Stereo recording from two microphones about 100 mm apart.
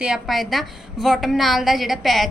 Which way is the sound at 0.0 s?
5° right (ahead or behind).